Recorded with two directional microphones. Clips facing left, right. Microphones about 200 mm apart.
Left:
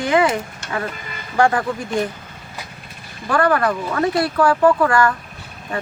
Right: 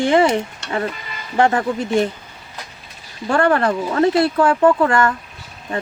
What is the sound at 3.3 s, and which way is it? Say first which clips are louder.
Speech: right 1 dB; 25° right (ahead or behind).